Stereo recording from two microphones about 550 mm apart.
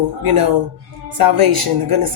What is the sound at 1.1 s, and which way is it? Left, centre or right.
Speech, right.